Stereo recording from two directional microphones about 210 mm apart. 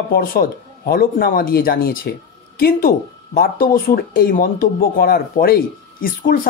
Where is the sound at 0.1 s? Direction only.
45° left (ahead or behind).